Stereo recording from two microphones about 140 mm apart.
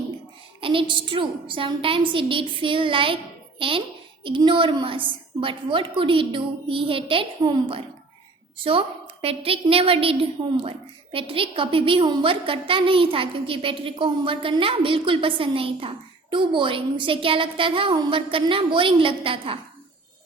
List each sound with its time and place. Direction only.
0.6 s a woman's voice: 40° right (ahead or behind)